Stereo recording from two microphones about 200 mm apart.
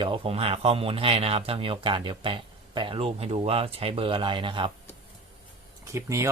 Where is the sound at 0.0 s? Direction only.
25° right (ahead or behind).